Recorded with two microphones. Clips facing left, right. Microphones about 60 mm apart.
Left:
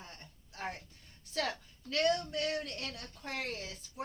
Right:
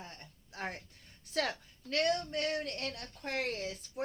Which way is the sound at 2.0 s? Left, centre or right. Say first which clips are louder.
Left 3 dB; right.